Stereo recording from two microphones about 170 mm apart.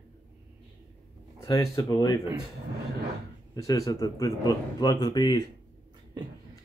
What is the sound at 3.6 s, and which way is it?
Speech, 20° left (ahead or behind).